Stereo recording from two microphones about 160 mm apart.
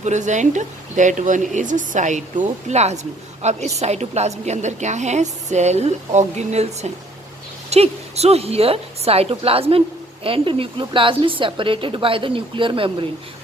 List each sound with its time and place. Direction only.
0.0 s a woman's voice: 50° right (ahead or behind)